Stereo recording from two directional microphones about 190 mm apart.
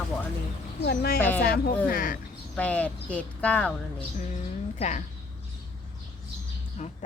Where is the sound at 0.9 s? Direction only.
55° left (ahead or behind).